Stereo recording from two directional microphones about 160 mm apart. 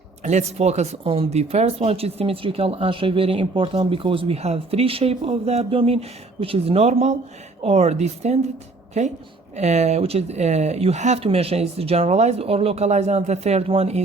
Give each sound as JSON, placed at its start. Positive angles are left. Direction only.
{"t": 0.2, "sound": "speech", "side_deg": -45}